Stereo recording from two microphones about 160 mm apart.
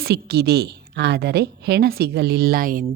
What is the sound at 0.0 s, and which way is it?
A woman's voice, 85° right.